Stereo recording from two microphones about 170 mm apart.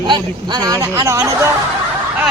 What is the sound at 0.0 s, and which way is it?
Speech, 25° right (ahead or behind).